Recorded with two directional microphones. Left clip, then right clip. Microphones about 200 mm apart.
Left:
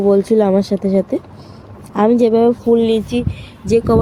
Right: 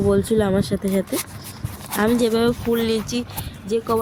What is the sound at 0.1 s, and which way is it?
Speech, 10° right (ahead or behind).